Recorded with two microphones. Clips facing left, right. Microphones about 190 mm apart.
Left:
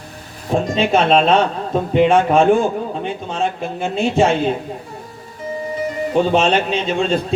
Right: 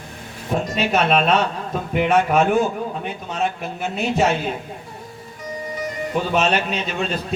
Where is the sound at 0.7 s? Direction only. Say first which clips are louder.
Left 4 dB; 30° left (ahead or behind).